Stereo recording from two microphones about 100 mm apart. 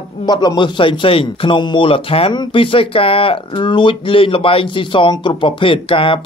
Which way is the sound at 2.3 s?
55° left (ahead or behind).